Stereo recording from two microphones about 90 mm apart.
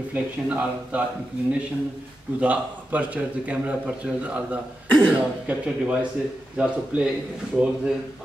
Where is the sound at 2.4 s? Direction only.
15° right (ahead or behind).